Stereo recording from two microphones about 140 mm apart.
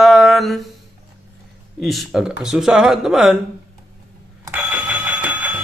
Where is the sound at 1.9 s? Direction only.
Centre (ahead or behind).